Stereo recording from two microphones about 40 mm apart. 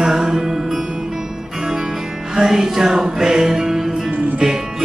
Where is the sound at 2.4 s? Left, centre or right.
Centre.